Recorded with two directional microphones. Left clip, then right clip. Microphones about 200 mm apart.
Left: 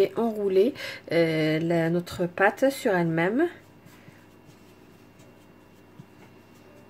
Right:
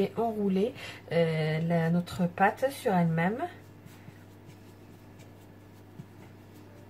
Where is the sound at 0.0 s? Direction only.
50° left (ahead or behind).